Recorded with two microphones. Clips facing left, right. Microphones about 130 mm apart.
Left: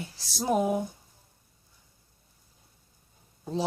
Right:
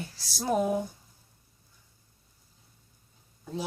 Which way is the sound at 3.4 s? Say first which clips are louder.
Left 5 dB; 30° left (ahead or behind).